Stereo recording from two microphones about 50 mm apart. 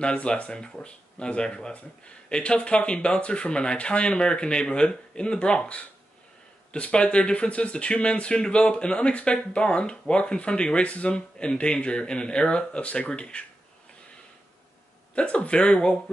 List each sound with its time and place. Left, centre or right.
0.0 s speech: left
15.1 s speech: left